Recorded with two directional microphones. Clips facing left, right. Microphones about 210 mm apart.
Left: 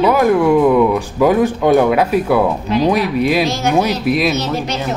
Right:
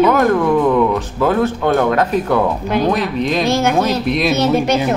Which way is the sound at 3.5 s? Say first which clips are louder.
Right 3 dB; 55° right (ahead or behind).